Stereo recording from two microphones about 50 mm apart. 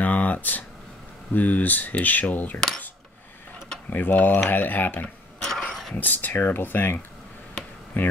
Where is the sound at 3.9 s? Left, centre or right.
Left.